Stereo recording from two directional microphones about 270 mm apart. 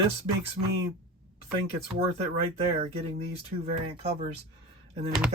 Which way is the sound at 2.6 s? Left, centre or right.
Right.